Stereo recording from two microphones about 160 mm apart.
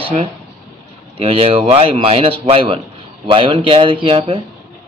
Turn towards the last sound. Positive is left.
turn(degrees=-35)  # may be behind; listen again after turning